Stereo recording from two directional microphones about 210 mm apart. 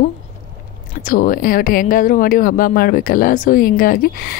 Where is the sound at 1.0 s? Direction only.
40° left (ahead or behind).